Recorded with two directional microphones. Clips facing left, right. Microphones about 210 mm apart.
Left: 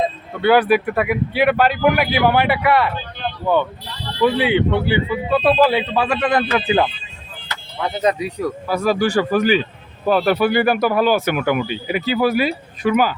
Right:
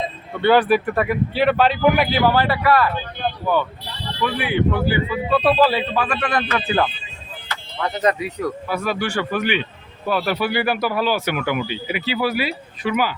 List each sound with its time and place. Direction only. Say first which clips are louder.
0.4 s a man's voice: left 1 dB; 10° left (ahead or behind)
2.2 s a man's voice: left 3 dB; 15° left (ahead or behind)
4.2 s a man's voice: left 5 dB; 25° left (ahead or behind)
8.6 s speech: left 10 dB; 40° left (ahead or behind)